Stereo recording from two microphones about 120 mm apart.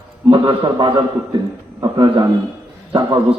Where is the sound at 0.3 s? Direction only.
40° right (ahead or behind).